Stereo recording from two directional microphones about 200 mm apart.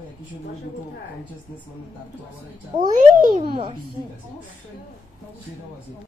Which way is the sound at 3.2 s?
25° right (ahead or behind).